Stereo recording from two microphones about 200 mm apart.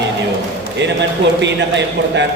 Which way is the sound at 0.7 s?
60° right (ahead or behind).